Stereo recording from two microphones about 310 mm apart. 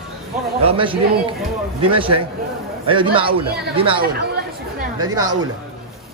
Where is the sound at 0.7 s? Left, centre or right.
Centre.